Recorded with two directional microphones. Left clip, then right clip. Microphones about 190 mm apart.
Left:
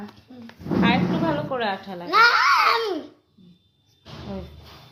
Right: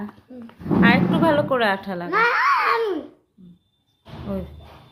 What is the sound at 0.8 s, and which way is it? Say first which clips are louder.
A woman's voice: right 4 dB; 25° right (ahead or behind).